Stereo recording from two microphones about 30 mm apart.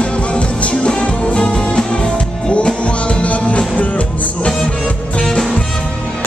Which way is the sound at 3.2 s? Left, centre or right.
Left.